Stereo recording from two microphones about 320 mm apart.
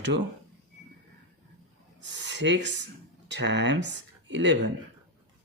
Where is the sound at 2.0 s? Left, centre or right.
Right.